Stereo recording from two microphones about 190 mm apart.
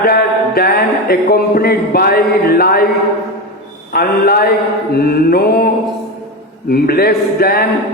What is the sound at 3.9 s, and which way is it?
Music, 50° left (ahead or behind).